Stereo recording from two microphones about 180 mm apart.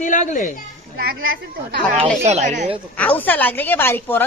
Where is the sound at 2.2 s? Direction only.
40° right (ahead or behind).